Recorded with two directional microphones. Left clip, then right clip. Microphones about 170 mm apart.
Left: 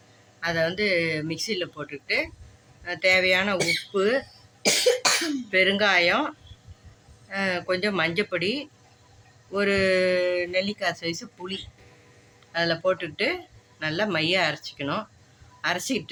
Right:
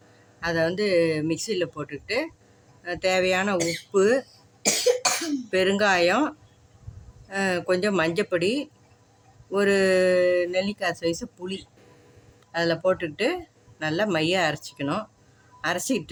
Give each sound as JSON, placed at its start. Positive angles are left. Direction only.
{"t": 0.3, "sound": "speech", "side_deg": -60}
{"t": 4.6, "sound": "cough", "side_deg": 35}
{"t": 5.5, "sound": "speech", "side_deg": -65}